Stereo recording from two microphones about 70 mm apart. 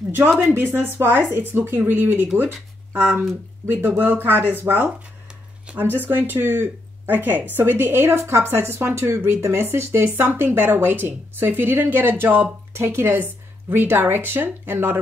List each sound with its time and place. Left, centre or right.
0.6 s speech: right
5.8 s speech: right